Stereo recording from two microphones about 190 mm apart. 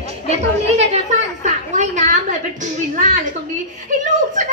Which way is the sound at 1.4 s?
40° right (ahead or behind).